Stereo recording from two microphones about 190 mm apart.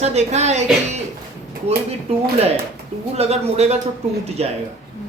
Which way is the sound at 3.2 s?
35° right (ahead or behind).